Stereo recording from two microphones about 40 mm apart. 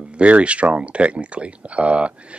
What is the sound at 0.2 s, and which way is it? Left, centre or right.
Speech, right.